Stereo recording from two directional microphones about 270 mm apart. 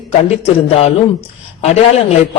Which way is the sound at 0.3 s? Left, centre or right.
Left.